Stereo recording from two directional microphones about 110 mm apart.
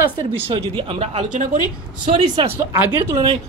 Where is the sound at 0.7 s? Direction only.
60° right (ahead or behind).